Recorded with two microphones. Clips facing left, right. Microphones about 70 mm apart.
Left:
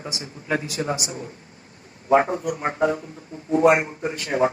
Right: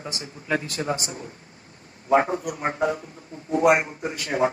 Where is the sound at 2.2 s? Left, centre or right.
Left.